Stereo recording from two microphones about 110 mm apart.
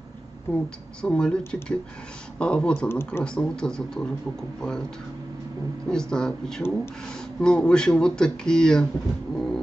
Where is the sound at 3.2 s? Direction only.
10° left (ahead or behind).